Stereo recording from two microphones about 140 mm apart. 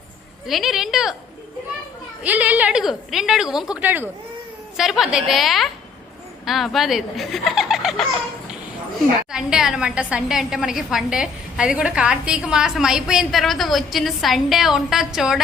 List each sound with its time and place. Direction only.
0.4 s a woman's voice: centre (ahead or behind)
2.2 s a woman's voice: 10° right (ahead or behind)
4.8 s a woman's voice: 5° right (ahead or behind)
9.3 s a woman's voice: 5° right (ahead or behind)